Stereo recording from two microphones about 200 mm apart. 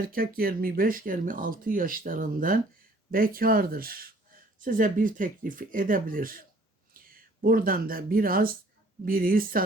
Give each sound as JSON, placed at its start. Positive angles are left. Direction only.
{"t": 0.1, "sound": "speech", "side_deg": -45}